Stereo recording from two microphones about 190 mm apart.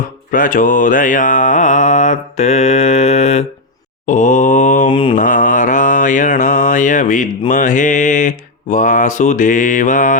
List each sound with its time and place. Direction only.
0.3 s mantra: 45° left (ahead or behind)
4.9 s mantra: 25° left (ahead or behind)
5.1 s mantra: 45° left (ahead or behind)